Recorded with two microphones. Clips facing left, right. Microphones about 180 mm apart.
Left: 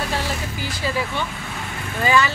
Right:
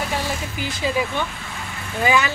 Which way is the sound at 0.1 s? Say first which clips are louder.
Even; 15° right (ahead or behind).